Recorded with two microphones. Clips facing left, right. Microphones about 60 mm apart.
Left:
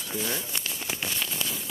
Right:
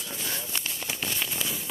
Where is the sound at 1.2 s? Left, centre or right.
Centre.